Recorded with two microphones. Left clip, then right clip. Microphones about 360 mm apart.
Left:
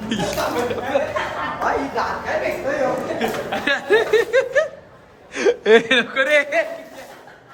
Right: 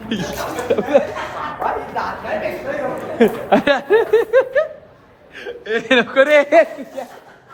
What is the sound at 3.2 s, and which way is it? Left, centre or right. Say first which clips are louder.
Speech: right 8 dB; centre.